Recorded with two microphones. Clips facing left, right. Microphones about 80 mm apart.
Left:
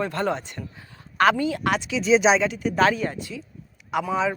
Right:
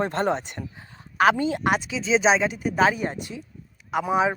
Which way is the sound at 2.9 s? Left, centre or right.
Right.